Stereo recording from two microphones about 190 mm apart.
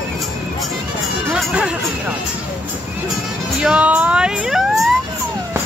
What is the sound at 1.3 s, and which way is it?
Music, 5° right (ahead or behind).